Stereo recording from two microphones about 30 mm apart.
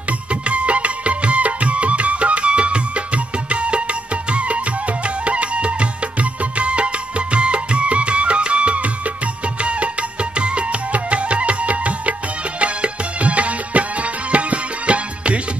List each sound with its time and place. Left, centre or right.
0.3 s music: right